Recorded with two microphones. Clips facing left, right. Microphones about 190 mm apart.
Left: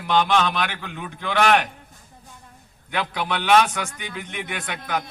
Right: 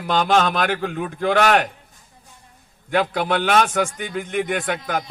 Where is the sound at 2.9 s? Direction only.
50° right (ahead or behind).